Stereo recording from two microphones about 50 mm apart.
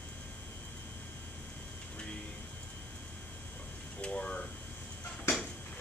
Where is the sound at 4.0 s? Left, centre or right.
Left.